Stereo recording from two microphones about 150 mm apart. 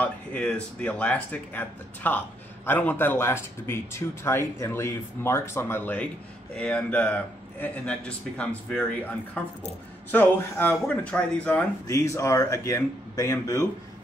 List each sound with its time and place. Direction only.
0.0 s speech: 10° left (ahead or behind)
11.9 s speech: 20° left (ahead or behind)